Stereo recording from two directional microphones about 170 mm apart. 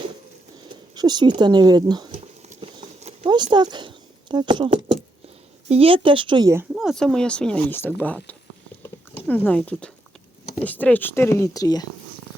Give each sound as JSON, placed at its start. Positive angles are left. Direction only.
{"t": 0.9, "sound": "speech", "side_deg": -25}
{"t": 2.1, "sound": "horse", "side_deg": -40}
{"t": 3.2, "sound": "speech", "side_deg": -25}
{"t": 6.7, "sound": "speech", "side_deg": 0}